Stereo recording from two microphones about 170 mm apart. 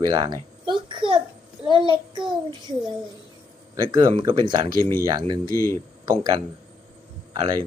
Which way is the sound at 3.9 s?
25° right (ahead or behind).